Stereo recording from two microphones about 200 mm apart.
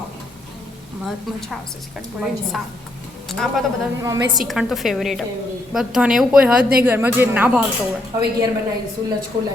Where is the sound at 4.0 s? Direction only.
15° right (ahead or behind).